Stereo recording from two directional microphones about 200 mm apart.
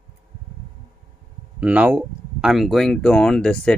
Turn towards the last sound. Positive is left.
turn(degrees=5)  # may be behind; listen again after turning